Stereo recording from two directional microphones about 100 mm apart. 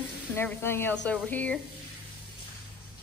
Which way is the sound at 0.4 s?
20° left (ahead or behind).